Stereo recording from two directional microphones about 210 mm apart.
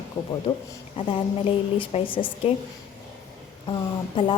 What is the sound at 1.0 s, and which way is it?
A woman's voice, 25° left (ahead or behind).